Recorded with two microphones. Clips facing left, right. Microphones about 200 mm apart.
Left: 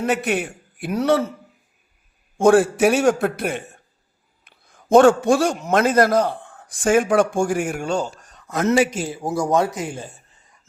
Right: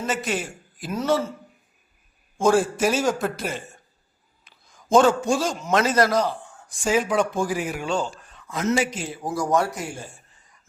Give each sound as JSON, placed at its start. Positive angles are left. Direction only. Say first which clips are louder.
{"t": 0.0, "sound": "a man's voice", "louder": "left 5 dB", "side_deg": 60}
{"t": 2.4, "sound": "a man's voice", "louder": "left 5 dB", "side_deg": 60}
{"t": 8.6, "sound": "a man's voice", "louder": "left 5 dB", "side_deg": 60}
{"t": 9.1, "sound": "speech", "louder": "left 3 dB", "side_deg": 25}